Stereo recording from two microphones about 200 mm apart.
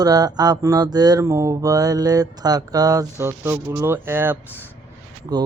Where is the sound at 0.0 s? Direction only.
20° right (ahead or behind).